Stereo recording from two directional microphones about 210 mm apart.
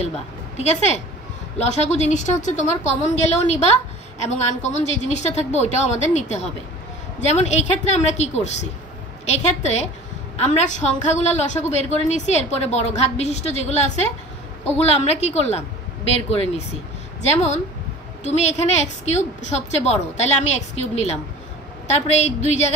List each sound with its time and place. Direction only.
0.6 s a woman's voice: 30° left (ahead or behind)
18.2 s a woman's voice: 30° left (ahead or behind)